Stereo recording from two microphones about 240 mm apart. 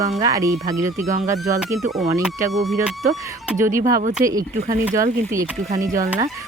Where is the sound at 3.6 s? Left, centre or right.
Centre.